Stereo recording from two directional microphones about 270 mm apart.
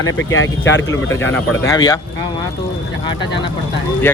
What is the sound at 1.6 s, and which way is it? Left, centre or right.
Speech, centre.